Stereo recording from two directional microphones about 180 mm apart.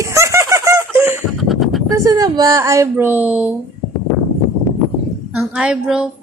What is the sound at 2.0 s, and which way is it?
A woman's voice, 20° right (ahead or behind).